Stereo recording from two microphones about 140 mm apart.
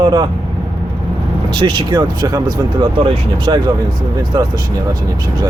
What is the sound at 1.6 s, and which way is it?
Speech, 35° right (ahead or behind).